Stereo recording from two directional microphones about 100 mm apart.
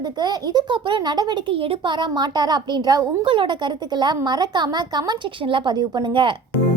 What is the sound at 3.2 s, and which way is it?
A woman's voice, 55° right (ahead or behind).